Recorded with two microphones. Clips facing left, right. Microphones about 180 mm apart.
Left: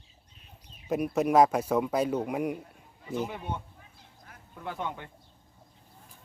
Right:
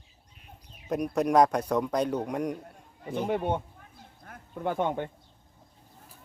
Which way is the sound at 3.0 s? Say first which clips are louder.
Right 5 dB; 55° right (ahead or behind).